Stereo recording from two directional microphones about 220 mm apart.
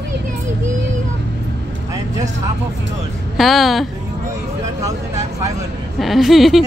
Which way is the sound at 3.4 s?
Centre (ahead or behind).